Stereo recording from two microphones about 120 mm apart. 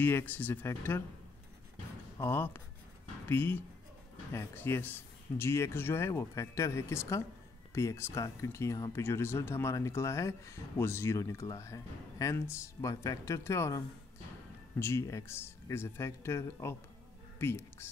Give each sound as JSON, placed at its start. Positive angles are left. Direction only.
{"t": 0.0, "sound": "speech", "side_deg": 15}
{"t": 2.2, "sound": "speech", "side_deg": 20}